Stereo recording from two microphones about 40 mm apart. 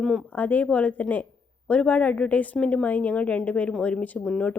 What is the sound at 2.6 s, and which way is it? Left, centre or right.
Speech, left.